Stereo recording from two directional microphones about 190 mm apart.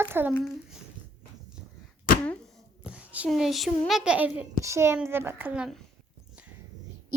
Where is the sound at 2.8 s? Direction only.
10° right (ahead or behind).